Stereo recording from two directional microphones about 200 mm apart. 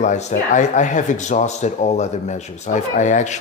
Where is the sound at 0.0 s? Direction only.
35° left (ahead or behind).